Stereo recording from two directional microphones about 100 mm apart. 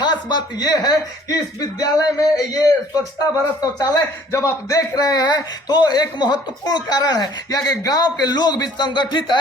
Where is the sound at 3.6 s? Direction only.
40° left (ahead or behind).